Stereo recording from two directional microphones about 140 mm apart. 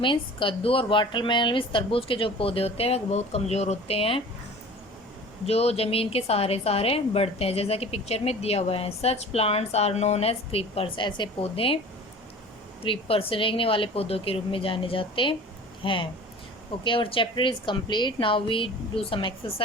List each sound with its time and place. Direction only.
0.0 s a woman's voice: 35° left (ahead or behind)
5.5 s a woman's voice: 45° left (ahead or behind)
12.8 s speech: 40° left (ahead or behind)